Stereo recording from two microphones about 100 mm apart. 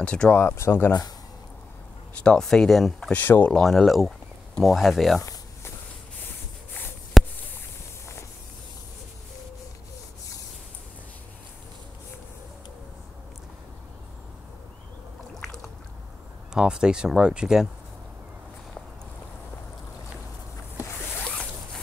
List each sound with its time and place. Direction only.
0.0 s speech: 10° left (ahead or behind)
0.4 s speech: 25° left (ahead or behind)
2.2 s speech: 5° left (ahead or behind)
3.2 s speech: 20° left (ahead or behind)
3.5 s speech: 5° left (ahead or behind)
7.2 s a sound: centre (ahead or behind)
16.5 s speech: 10° right (ahead or behind)